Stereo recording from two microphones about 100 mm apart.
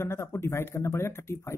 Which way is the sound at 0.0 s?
25° left (ahead or behind).